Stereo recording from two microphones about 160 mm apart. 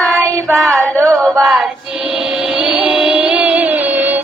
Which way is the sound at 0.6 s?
5° left (ahead or behind).